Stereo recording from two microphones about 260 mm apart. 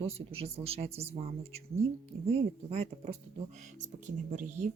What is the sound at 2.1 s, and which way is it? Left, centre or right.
Speech, right.